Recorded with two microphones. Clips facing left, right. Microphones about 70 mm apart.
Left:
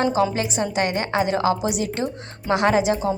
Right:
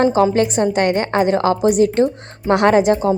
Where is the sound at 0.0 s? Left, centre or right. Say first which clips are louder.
Right 6 dB; right.